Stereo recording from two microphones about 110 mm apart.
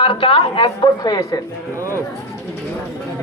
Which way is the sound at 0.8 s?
35° left (ahead or behind).